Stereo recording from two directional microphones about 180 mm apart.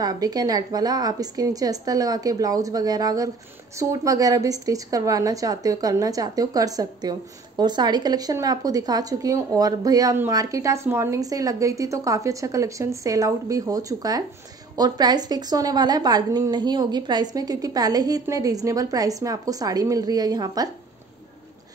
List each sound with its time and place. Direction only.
0.0 s a woman's voice: 20° right (ahead or behind)